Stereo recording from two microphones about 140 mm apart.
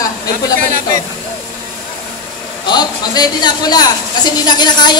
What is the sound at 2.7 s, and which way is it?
A woman's voice, 30° left (ahead or behind).